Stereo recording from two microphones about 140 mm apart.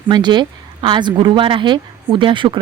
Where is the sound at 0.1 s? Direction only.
35° right (ahead or behind).